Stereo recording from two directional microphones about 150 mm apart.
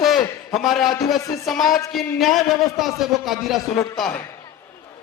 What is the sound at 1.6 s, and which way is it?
Speech, 25° left (ahead or behind).